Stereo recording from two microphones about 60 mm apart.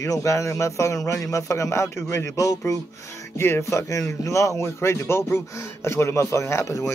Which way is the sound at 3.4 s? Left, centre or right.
Left.